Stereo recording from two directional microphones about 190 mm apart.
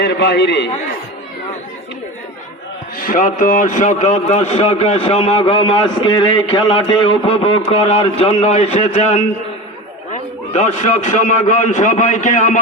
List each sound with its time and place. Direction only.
0.0 s a man's voice: 65° left (ahead or behind)
3.0 s a man's voice: 45° left (ahead or behind)
10.5 s a man's voice: 35° left (ahead or behind)